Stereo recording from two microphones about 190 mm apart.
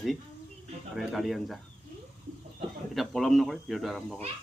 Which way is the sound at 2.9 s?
Centre (ahead or behind).